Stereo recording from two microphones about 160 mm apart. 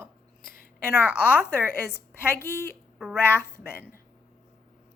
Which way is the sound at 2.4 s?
15° left (ahead or behind).